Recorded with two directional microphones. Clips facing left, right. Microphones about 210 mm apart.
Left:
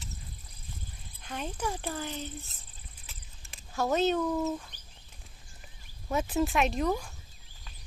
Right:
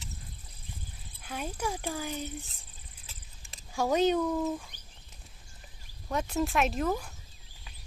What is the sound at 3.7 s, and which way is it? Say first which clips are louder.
Speech: right 1 dB; 10° right (ahead or behind).